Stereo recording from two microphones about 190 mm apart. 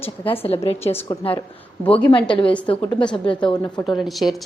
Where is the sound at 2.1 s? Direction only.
25° left (ahead or behind).